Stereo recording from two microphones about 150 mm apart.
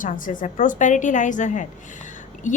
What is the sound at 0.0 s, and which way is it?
A woman's voice, 60° left (ahead or behind).